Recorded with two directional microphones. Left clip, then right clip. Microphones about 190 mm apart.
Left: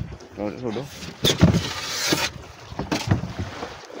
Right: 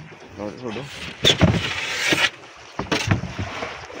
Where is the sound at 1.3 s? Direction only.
45° left (ahead or behind).